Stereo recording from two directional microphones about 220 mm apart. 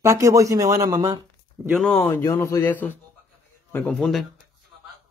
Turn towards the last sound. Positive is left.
turn(degrees=0)  # may be behind; listen again after turning